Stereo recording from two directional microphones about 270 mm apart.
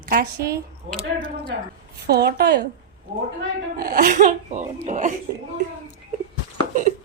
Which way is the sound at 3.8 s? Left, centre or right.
Right.